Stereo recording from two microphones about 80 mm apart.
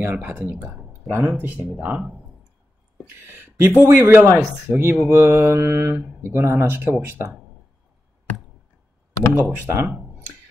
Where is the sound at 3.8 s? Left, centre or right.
Right.